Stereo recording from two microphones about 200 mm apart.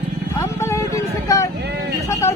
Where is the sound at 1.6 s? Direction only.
55° right (ahead or behind).